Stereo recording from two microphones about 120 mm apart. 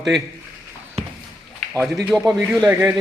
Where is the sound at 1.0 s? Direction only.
60° right (ahead or behind).